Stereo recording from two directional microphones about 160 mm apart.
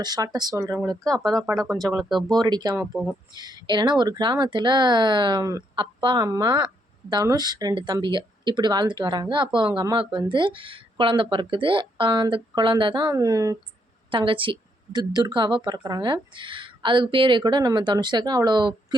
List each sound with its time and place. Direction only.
0.0 s speech: 25° right (ahead or behind)
1.1 s speech: 5° left (ahead or behind)
2.4 s speech: 25° right (ahead or behind)
2.9 s speech: centre (ahead or behind)
3.3 s speech: 25° right (ahead or behind)
14.1 s speech: 30° right (ahead or behind)